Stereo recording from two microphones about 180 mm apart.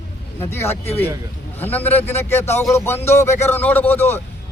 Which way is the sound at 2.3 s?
40° left (ahead or behind).